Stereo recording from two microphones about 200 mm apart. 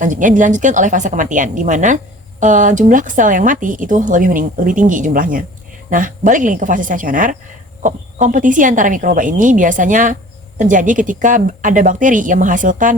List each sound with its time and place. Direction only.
0.0 s speech: 40° right (ahead or behind)